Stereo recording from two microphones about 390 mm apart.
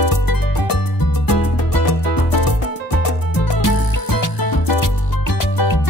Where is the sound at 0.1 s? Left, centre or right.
Left.